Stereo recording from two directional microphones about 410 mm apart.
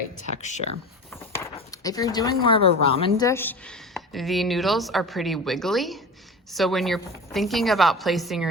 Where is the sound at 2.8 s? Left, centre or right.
Centre.